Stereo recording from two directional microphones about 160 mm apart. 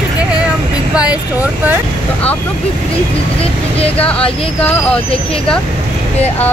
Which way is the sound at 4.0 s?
5° left (ahead or behind).